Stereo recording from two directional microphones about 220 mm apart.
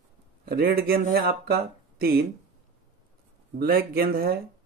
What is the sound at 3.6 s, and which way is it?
Speech, 45° right (ahead or behind).